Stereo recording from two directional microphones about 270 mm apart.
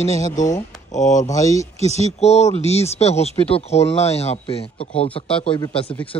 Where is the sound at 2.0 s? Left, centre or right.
Left.